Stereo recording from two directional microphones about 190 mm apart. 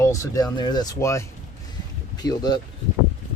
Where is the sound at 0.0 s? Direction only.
15° left (ahead or behind).